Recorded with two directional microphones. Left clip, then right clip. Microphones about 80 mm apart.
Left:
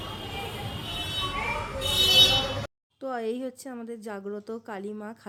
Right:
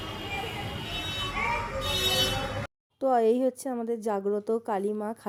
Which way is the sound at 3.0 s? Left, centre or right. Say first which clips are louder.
Right 8 dB; right.